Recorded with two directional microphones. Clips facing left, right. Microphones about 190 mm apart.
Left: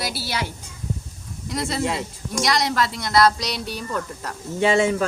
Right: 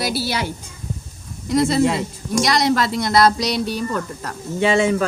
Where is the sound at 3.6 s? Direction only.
10° left (ahead or behind).